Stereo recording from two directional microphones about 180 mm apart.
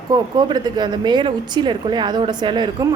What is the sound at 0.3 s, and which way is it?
A woman's voice, 25° right (ahead or behind).